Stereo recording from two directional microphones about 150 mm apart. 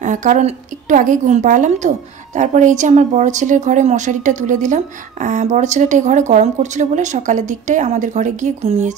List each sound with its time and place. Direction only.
0.0 s a woman's voice: 55° right (ahead or behind)